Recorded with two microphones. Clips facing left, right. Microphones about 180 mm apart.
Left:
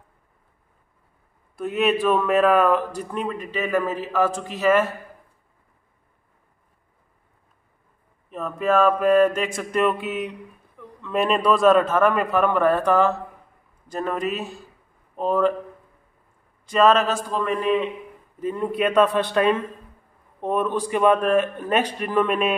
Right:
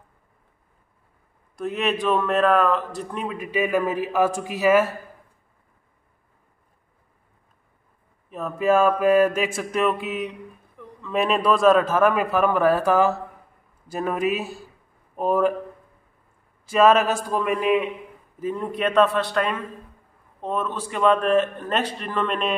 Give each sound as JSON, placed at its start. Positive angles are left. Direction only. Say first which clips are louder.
{"t": 1.6, "sound": "a man's voice", "louder": "left 3 dB", "side_deg": 0}
{"t": 8.3, "sound": "a man's voice", "louder": "right 2 dB", "side_deg": -5}
{"t": 16.6, "sound": "a man's voice", "louder": "right 1 dB", "side_deg": -5}
{"t": 18.4, "sound": "a man's voice", "louder": "left 2 dB", "side_deg": 0}
{"t": 19.0, "sound": "a man's voice", "louder": "left 4 dB", "side_deg": 20}